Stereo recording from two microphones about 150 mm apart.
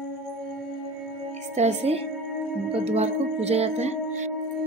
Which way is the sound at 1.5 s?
50° right (ahead or behind).